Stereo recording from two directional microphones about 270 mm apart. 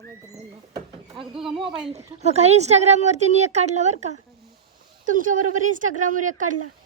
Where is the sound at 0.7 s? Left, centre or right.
Centre.